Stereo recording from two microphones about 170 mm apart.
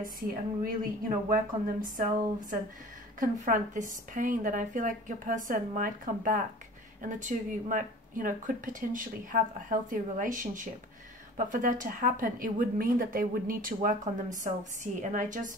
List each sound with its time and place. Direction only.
0.0 s a woman's voice: 55° right (ahead or behind)
3.2 s speech: 50° right (ahead or behind)